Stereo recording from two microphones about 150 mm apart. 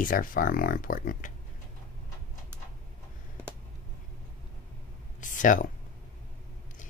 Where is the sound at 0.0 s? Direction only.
65° left (ahead or behind).